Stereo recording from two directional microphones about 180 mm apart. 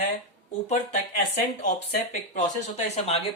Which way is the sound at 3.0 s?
35° left (ahead or behind).